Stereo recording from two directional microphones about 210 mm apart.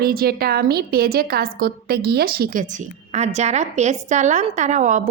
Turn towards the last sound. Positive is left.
turn(degrees=-35)  # may be behind; listen again after turning